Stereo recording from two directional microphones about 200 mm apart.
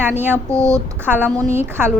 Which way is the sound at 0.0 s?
10° right (ahead or behind).